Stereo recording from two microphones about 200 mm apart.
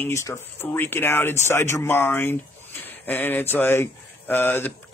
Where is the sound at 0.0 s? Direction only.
15° left (ahead or behind).